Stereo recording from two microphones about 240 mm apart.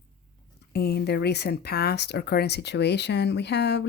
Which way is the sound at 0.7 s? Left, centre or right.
Left.